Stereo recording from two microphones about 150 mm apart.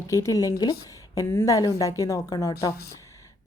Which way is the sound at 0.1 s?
20° left (ahead or behind).